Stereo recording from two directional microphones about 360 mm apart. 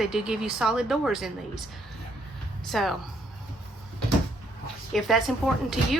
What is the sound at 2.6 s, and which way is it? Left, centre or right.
Speech, centre.